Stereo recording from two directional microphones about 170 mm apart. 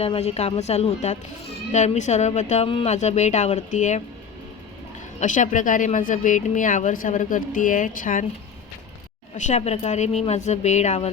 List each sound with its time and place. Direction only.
0.0 s a woman's voice: 35° left (ahead or behind)
5.2 s speech: 50° left (ahead or behind)
9.4 s a woman's voice: 40° left (ahead or behind)